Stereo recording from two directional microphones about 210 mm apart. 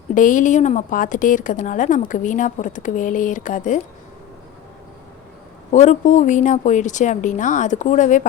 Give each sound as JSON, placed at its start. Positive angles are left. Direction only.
{"t": 0.1, "sound": "speech", "side_deg": 40}
{"t": 5.7, "sound": "speech", "side_deg": 35}